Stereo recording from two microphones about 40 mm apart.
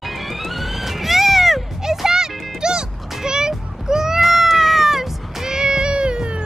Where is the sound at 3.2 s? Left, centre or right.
Centre.